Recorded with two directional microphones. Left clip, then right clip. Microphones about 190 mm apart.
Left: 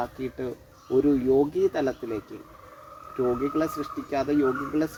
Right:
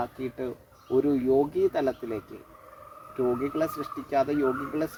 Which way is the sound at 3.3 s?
15° right (ahead or behind).